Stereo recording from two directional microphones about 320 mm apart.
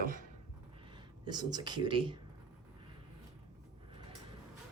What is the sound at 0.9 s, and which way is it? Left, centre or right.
Speech, centre.